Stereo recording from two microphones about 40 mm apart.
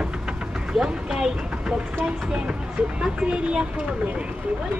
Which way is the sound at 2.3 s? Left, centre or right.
Right.